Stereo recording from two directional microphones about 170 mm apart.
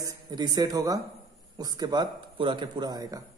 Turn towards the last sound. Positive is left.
turn(degrees=-25)  # may be behind; listen again after turning